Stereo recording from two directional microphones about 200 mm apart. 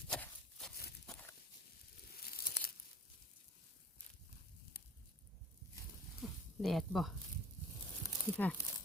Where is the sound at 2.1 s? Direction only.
50° left (ahead or behind).